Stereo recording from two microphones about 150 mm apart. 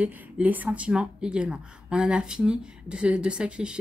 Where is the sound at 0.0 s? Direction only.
10° right (ahead or behind).